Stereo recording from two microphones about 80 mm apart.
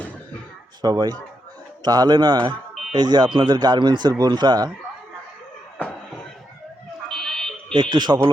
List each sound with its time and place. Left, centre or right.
0.8 s speech: right
7.1 s fire alarm: centre
7.7 s speech: right